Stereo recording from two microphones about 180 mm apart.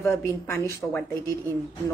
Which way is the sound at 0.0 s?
15° left (ahead or behind).